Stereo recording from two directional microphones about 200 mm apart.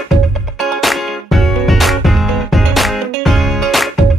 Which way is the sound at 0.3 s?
Centre (ahead or behind).